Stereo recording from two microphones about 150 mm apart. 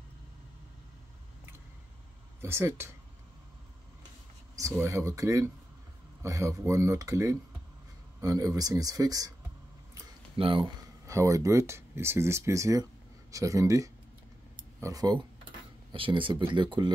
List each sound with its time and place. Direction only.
2.4 s speech: 15° right (ahead or behind)
4.6 s speech: 20° right (ahead or behind)
10.3 s speech: 35° right (ahead or behind)
11.1 s speech: 20° right (ahead or behind)